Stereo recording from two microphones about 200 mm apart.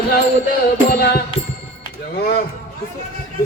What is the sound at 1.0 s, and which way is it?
Music, 55° left (ahead or behind).